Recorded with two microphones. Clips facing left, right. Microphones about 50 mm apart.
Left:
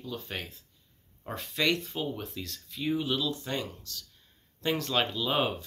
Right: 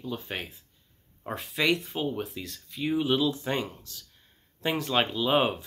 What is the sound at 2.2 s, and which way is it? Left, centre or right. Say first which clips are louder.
Speech: right 1 dB; centre.